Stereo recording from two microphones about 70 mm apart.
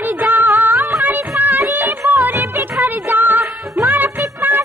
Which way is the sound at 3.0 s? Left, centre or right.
Right.